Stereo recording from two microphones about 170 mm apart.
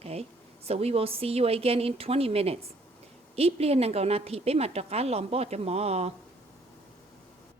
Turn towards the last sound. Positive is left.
turn(degrees=-35)  # may be behind; listen again after turning